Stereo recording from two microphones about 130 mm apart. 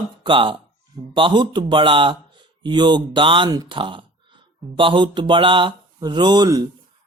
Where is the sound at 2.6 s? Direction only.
35° right (ahead or behind).